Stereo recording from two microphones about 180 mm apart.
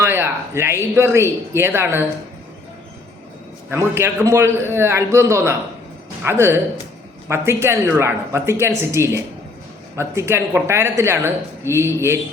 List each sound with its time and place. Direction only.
0.0 s speech: 15° right (ahead or behind)
3.7 s speech: 15° right (ahead or behind)